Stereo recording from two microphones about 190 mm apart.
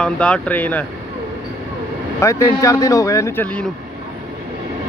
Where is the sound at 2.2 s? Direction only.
15° left (ahead or behind).